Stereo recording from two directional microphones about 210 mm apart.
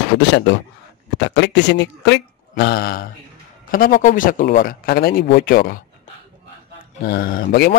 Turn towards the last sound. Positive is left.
turn(degrees=45)  # may be behind; listen again after turning